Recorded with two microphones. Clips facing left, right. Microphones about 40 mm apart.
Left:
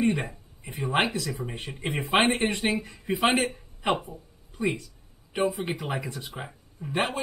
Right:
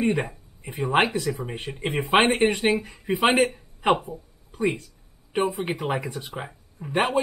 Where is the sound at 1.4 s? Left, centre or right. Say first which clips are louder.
Right 3 dB; centre.